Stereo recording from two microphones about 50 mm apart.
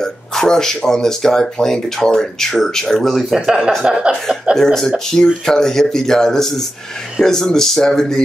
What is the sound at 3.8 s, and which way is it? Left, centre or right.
Speech, centre.